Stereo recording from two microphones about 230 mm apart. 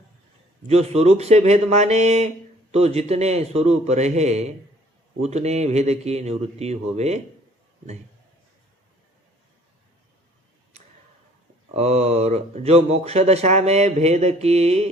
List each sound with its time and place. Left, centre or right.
0.7 s speech: right
11.7 s speech: right